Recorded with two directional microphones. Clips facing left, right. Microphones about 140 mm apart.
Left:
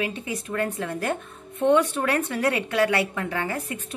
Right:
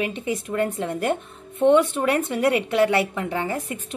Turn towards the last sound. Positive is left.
turn(degrees=-20)  # may be behind; listen again after turning